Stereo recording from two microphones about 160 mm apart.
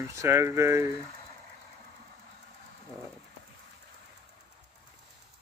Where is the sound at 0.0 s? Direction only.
15° right (ahead or behind).